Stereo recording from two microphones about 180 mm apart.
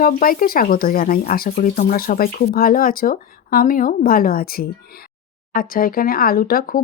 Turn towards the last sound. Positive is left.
turn(degrees=50)  # may be behind; listen again after turning